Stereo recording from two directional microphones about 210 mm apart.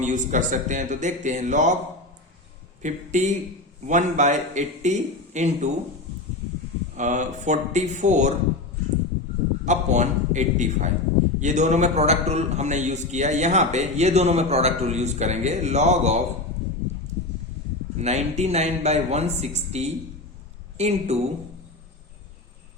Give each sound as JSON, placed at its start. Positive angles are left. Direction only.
{"t": 0.0, "sound": "a man's voice", "side_deg": -35}
{"t": 2.8, "sound": "a man's voice", "side_deg": -35}
{"t": 6.9, "sound": "a man's voice", "side_deg": -35}
{"t": 9.6, "sound": "a man's voice", "side_deg": -35}
{"t": 17.9, "sound": "a man's voice", "side_deg": -30}